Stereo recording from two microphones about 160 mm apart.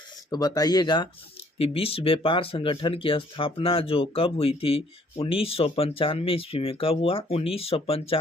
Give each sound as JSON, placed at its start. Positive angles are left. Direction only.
{"t": 0.3, "sound": "speech", "side_deg": 25}
{"t": 1.5, "sound": "speech", "side_deg": 35}